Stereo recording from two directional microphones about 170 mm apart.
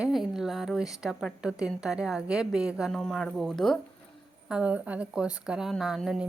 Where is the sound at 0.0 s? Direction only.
Centre (ahead or behind).